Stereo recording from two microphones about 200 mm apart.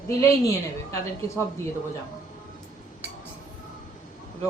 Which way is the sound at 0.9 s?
15° left (ahead or behind).